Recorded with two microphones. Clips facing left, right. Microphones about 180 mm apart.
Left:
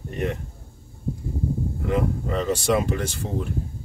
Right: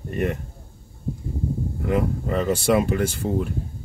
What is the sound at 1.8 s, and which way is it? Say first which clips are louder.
Speech: right 2 dB; 50° right (ahead or behind).